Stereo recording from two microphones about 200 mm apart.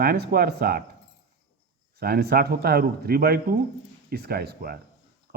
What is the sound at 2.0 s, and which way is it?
Speech, 50° right (ahead or behind).